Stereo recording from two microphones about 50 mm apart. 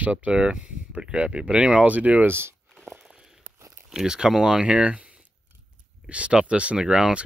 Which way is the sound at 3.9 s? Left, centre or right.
Centre.